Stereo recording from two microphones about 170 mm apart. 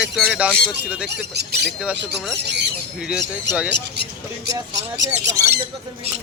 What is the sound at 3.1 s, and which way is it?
Speech, 5° right (ahead or behind).